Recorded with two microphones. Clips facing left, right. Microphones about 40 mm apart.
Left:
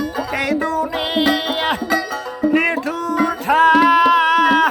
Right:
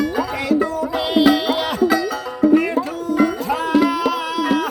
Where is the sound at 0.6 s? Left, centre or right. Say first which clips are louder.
Even; left.